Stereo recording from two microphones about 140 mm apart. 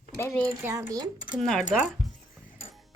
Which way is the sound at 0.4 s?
20° right (ahead or behind).